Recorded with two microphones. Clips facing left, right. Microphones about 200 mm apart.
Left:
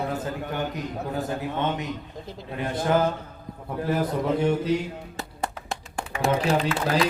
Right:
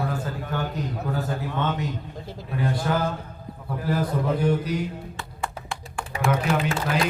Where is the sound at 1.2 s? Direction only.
20° left (ahead or behind).